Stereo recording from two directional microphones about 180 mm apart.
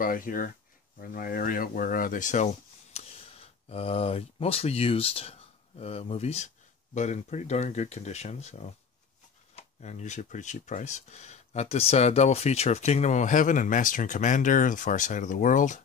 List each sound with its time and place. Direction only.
0.0 s speech: 50° left (ahead or behind)